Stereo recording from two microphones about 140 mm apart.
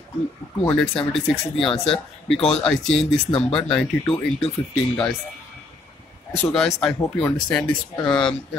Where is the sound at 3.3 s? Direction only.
45° left (ahead or behind).